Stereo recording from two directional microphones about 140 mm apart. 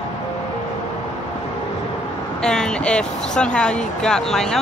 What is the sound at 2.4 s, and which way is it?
Speech, 5° left (ahead or behind).